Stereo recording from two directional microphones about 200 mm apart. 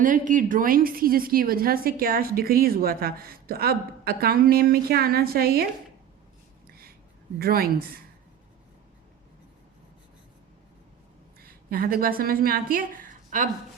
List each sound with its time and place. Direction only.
0.0 s a woman's voice: 40° right (ahead or behind)
6.7 s a sound: 50° right (ahead or behind)
7.3 s a woman's voice: 50° right (ahead or behind)
11.3 s a woman's voice: 50° right (ahead or behind)